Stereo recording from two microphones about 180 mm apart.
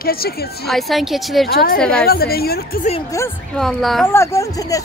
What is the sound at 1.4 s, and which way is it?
Speech, 65° left (ahead or behind).